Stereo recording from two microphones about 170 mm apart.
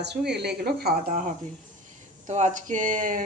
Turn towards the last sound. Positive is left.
turn(degrees=-50)  # may be behind; listen again after turning